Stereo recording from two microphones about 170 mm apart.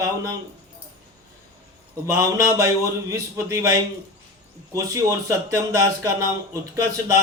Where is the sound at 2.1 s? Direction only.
15° right (ahead or behind).